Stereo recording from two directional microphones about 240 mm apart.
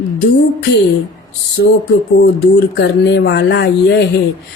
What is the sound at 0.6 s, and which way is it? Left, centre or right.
Speech, left.